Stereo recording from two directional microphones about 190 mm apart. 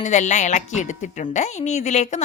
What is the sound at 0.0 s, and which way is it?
A woman's voice, 40° left (ahead or behind).